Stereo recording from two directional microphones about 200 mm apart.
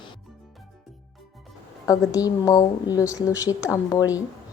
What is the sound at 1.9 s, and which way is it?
A woman's voice, 20° left (ahead or behind).